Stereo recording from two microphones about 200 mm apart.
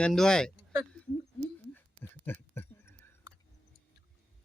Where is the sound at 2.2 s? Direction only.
10° left (ahead or behind).